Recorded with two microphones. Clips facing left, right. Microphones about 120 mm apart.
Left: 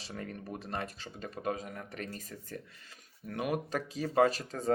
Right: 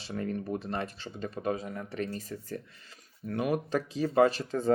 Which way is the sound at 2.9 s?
40° right (ahead or behind).